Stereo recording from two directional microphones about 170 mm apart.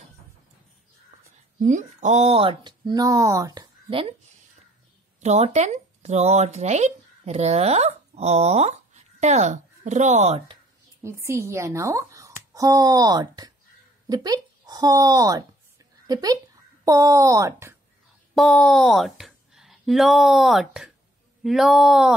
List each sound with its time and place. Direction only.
1.6 s speech: 45° right (ahead or behind); by 3.6 s 20° right (ahead or behind)
5.2 s speech: 40° right (ahead or behind)
11.0 s speech: 15° right (ahead or behind)
18.3 s speech: centre (ahead or behind)